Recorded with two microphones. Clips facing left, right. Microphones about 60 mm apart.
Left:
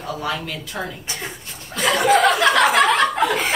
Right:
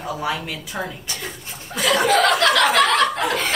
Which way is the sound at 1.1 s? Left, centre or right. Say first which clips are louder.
Left 1 dB; left.